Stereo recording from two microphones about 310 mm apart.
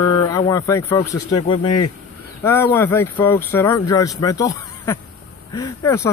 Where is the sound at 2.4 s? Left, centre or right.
Centre.